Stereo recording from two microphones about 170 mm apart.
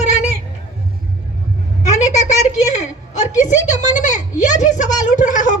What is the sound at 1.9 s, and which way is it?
A woman's voice, 45° left (ahead or behind).